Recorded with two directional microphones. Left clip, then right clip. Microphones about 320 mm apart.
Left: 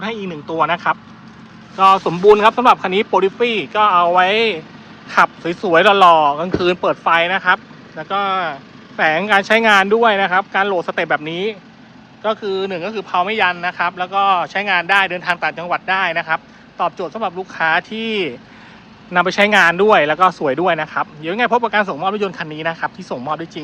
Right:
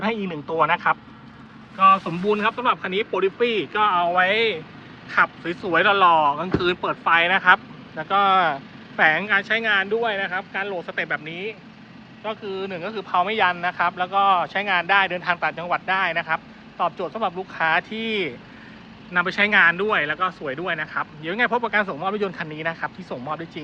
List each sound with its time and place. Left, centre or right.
0.0 s speech: centre